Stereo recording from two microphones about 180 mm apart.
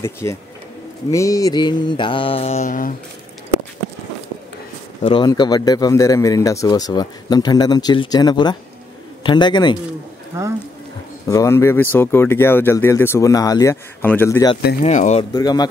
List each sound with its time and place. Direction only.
0.0 s speech: 15° left (ahead or behind); by 2.9 s 45° left (ahead or behind)
5.0 s speech: 25° left (ahead or behind)
10.3 s speech: 15° right (ahead or behind)
11.2 s speech: 20° left (ahead or behind)
14.8 s speech: 40° left (ahead or behind)
15.3 s speech: 20° left (ahead or behind)